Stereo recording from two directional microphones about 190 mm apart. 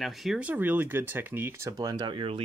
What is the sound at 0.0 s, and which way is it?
Speech, centre (ahead or behind).